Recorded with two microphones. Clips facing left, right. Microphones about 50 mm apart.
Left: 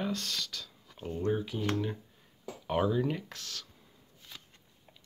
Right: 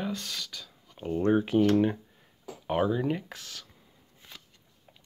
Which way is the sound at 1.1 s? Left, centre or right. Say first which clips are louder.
Right 8 dB; right.